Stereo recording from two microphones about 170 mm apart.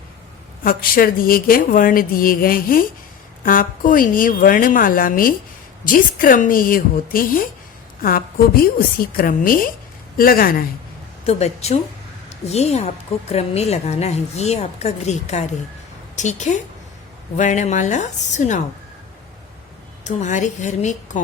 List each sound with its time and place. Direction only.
0.6 s speech: 60° left (ahead or behind)
11.3 s a woman's voice: 40° left (ahead or behind)
20.1 s speech: 45° left (ahead or behind)